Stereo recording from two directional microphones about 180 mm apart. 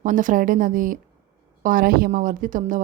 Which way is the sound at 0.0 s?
45° right (ahead or behind).